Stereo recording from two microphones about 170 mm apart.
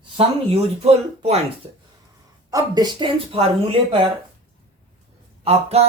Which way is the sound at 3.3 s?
35° right (ahead or behind).